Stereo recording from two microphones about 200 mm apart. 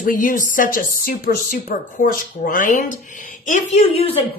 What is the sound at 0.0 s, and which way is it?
A woman's voice, 40° left (ahead or behind).